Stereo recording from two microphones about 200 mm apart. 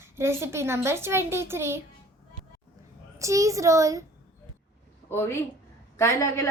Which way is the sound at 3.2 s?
15° right (ahead or behind).